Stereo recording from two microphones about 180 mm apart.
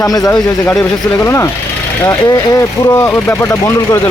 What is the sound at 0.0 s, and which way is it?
Speech, 20° left (ahead or behind).